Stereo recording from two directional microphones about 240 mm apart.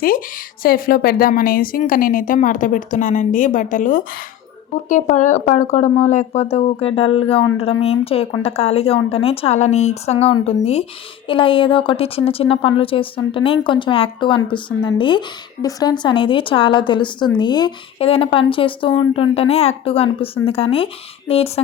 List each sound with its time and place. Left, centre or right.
0.6 s a woman's voice: left